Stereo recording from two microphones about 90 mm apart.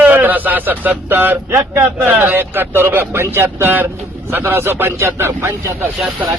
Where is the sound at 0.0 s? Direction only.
20° right (ahead or behind).